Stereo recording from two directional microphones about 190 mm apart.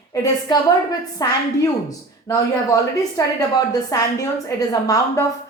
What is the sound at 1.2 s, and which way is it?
A woman's voice, 20° left (ahead or behind).